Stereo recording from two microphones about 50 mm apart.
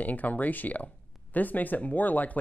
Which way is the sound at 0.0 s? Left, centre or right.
Left.